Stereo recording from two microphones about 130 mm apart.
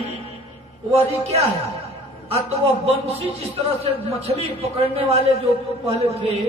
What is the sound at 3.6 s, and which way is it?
A man's voice, 55° right (ahead or behind).